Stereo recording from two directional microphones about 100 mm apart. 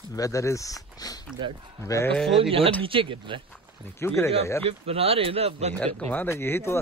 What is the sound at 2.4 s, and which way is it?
Speech, 70° right (ahead or behind).